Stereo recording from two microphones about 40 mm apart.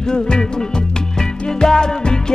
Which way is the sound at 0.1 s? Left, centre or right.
Centre.